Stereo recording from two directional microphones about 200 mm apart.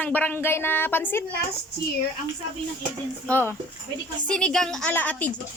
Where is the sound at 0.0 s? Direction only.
10° left (ahead or behind).